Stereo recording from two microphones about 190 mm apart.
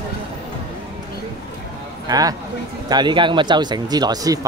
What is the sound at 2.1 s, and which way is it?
Speech, 20° right (ahead or behind).